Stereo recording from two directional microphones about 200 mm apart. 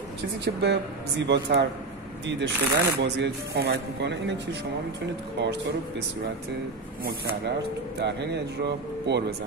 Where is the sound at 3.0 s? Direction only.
55° right (ahead or behind).